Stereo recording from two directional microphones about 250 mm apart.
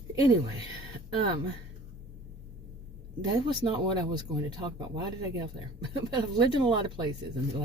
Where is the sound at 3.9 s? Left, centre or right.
Centre.